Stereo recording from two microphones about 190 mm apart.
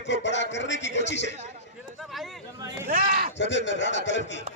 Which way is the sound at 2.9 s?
45° right (ahead or behind).